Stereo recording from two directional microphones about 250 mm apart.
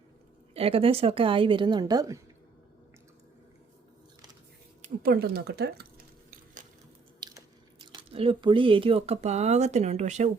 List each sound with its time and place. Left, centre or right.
0.5 s a woman's voice: right
4.8 s speech: right
6.3 s a sound: right
7.2 s speech: centre